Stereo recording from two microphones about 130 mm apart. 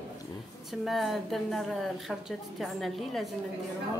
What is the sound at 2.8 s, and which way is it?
Speech, centre (ahead or behind).